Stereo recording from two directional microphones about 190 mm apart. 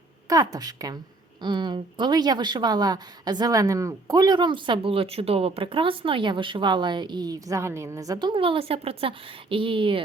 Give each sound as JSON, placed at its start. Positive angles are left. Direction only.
{"t": 0.3, "sound": "speech", "side_deg": -20}